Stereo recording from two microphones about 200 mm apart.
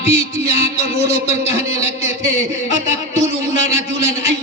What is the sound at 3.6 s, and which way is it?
Speech, 35° left (ahead or behind).